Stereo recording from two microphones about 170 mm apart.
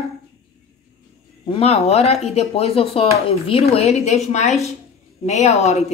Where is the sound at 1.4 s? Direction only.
35° left (ahead or behind).